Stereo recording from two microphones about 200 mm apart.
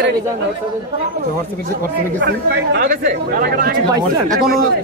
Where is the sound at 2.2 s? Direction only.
60° right (ahead or behind).